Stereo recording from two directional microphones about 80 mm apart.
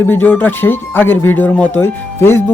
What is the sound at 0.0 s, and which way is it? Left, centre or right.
Speech, left.